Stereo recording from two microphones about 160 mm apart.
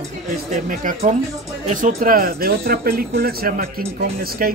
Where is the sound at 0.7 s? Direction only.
55° right (ahead or behind).